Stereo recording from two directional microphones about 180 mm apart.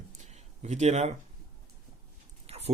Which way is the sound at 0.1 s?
40° right (ahead or behind).